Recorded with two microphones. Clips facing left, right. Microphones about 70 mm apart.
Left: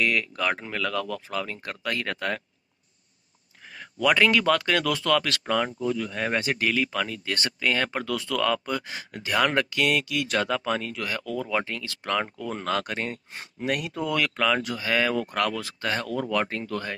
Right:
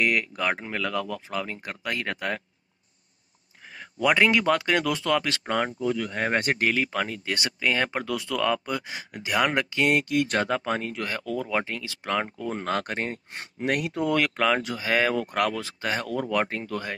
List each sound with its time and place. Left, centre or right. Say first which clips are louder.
0.0 s speech: even; right
3.7 s speech: even; right
5.9 s speech: right 1 dB; right
7.3 s speech: even; centre
13.3 s speech: right 2 dB; right
14.1 s speech: even; right